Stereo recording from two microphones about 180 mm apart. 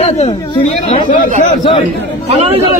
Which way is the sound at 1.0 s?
45° left (ahead or behind).